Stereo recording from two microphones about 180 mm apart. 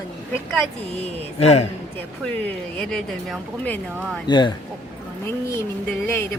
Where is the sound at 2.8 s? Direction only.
5° left (ahead or behind).